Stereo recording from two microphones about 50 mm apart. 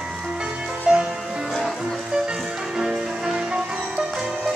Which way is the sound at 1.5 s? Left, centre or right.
Centre.